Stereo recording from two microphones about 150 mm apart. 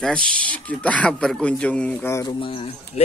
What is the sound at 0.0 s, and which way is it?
Speech, 5° left (ahead or behind).